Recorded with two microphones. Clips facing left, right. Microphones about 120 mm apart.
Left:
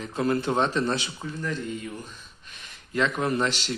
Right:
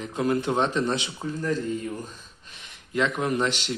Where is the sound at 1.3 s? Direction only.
40° right (ahead or behind).